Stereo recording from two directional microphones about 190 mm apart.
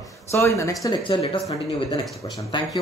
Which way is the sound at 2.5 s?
25° left (ahead or behind).